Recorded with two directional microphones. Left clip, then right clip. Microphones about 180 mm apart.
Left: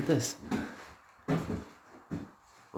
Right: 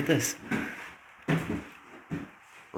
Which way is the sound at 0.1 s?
30° left (ahead or behind).